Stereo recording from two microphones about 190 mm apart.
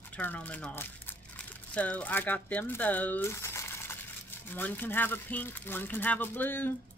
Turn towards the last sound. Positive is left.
turn(degrees=10)  # may be behind; listen again after turning